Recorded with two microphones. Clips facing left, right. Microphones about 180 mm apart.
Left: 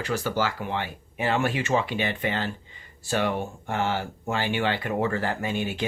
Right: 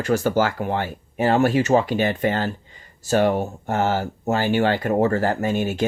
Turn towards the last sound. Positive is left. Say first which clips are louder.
# right 6 dB
turn(degrees=-45)  # may be behind; listen again after turning